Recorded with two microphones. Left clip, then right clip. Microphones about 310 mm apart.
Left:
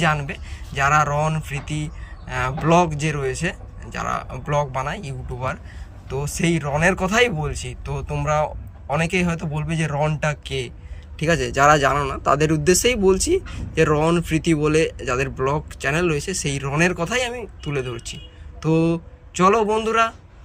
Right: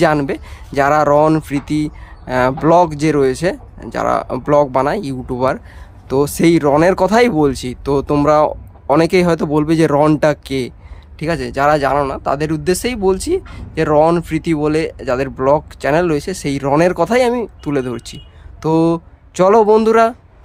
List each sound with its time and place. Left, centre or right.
0.0 s a man's voice: centre